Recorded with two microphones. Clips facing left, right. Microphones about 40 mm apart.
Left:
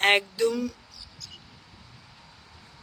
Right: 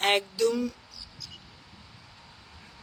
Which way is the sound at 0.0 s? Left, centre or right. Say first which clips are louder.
Left 4 dB; left.